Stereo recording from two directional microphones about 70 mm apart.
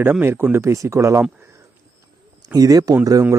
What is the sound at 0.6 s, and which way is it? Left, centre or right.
Speech, right.